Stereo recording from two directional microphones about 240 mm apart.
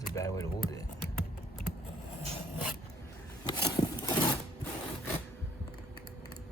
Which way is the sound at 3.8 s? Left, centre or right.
Centre.